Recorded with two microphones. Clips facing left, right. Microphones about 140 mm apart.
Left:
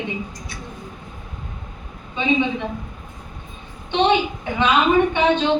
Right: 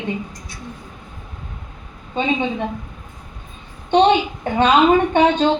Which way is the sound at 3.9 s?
45° right (ahead or behind).